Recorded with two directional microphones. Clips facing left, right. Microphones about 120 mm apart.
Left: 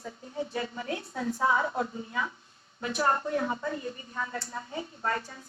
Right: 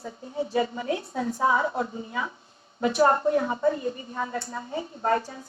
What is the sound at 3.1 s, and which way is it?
A woman's voice, 40° right (ahead or behind).